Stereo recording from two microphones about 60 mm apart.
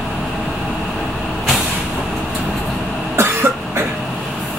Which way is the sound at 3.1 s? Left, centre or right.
Right.